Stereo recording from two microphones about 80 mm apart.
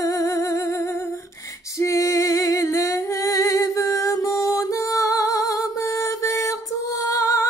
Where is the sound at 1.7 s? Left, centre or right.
Left.